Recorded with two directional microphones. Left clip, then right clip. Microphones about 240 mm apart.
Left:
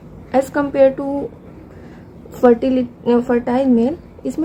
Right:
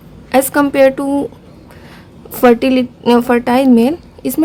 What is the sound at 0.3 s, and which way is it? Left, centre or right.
Speech, right.